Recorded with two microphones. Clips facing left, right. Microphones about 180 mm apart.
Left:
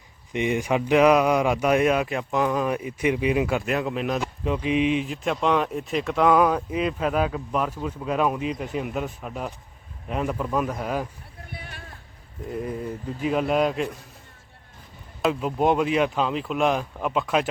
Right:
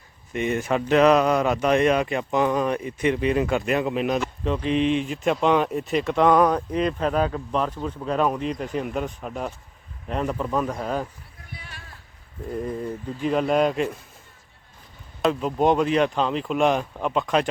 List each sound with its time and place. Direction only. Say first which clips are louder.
0.3 s speech: even; 15° left (ahead or behind)
11.5 s a sound: left 2 dB; 55° left (ahead or behind)
13.2 s speech: right 1 dB; 5° left (ahead or behind)
15.2 s speech: right 1 dB; 5° left (ahead or behind)